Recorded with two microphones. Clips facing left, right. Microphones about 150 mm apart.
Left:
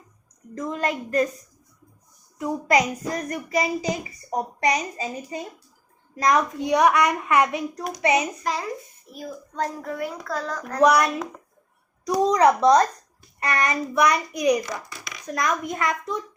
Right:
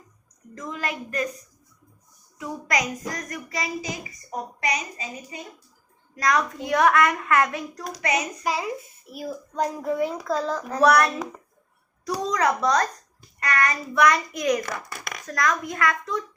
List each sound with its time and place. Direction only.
0.7 s a child's voice: 35° left (ahead or behind)
2.6 s a child's voice: 30° left (ahead or behind)
8.4 s a child's voice: 5° right (ahead or behind)
10.8 s a child's voice: 15° left (ahead or behind)
14.6 s a child's voice: 60° right (ahead or behind)
15.3 s a child's voice: 20° left (ahead or behind)